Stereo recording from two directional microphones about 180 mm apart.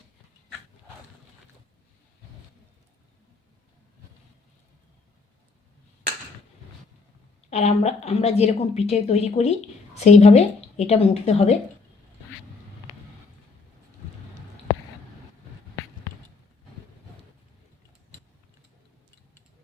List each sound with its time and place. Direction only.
7.5 s a woman's voice: 35° left (ahead or behind)